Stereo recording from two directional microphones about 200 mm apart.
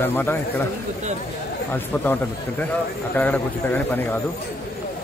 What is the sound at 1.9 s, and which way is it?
Speech, 10° left (ahead or behind).